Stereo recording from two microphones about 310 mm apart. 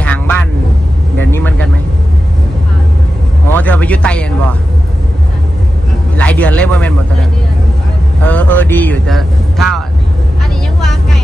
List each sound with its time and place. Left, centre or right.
0.0 s vehicle: centre
3.5 s a sound: centre
6.1 s a man's voice: centre
8.2 s speech: centre
10.8 s vehicle: centre